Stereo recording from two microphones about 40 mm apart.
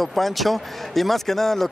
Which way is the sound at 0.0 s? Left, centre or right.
Centre.